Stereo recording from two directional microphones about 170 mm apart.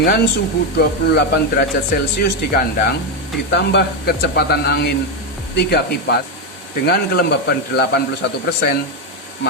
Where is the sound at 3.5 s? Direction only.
75° left (ahead or behind).